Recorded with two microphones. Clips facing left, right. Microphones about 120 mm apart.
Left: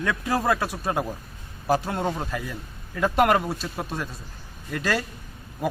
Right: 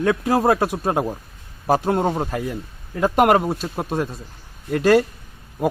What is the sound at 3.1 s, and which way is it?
Speech, 45° right (ahead or behind).